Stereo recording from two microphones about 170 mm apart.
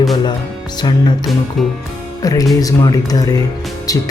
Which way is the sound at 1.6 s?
Centre (ahead or behind).